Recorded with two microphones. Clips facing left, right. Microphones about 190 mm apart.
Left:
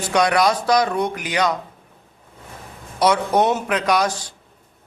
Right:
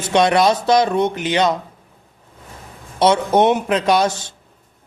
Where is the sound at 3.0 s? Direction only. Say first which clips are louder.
Right 3 dB; 25° right (ahead or behind).